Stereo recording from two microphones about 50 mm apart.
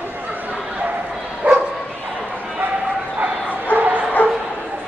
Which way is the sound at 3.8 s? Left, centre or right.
Right.